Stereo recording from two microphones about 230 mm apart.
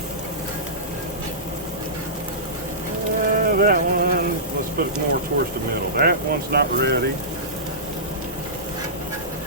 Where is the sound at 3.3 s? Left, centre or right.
Right.